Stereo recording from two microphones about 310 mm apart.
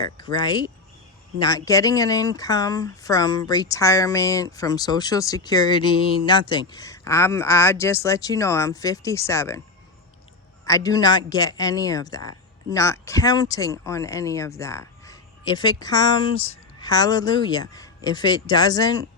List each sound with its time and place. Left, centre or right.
0.0 s speech: centre
10.7 s speech: centre